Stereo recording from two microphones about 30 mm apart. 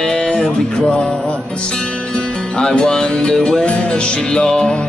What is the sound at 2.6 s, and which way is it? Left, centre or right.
Music, left.